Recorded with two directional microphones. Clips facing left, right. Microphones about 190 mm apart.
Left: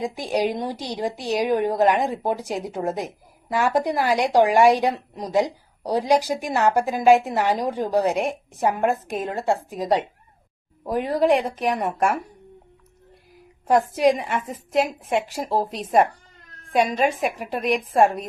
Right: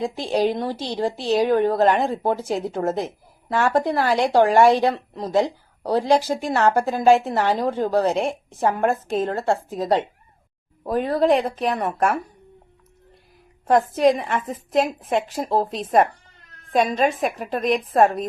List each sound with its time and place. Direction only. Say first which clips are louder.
0.0 s a woman's voice: right 2 dB; 15° left (ahead or behind)
13.7 s a woman's voice: right 1 dB; 10° left (ahead or behind)